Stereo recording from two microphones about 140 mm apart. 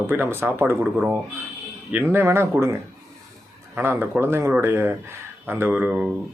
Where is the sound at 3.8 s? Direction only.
15° right (ahead or behind).